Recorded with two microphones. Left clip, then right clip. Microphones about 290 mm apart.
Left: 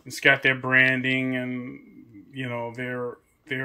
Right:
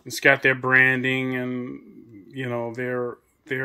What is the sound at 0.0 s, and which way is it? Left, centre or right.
Speech, right.